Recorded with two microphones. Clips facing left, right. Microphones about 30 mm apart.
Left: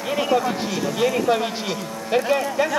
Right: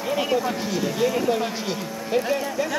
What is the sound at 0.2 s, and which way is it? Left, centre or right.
A man's voice, centre.